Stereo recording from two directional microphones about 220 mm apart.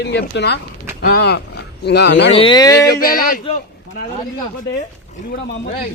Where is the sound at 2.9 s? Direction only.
40° left (ahead or behind).